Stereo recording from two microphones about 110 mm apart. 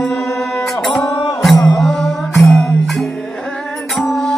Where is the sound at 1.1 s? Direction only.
30° left (ahead or behind).